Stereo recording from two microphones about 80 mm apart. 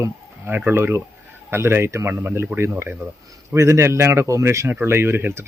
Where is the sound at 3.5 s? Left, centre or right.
Right.